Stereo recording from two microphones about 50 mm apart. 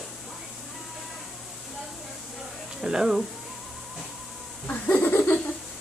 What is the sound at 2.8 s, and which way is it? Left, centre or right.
Speech, centre.